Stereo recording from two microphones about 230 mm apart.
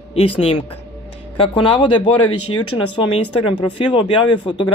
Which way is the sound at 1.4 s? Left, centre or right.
Left.